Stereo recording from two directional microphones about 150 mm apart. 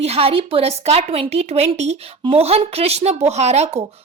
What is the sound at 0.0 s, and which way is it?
Speech, 40° right (ahead or behind).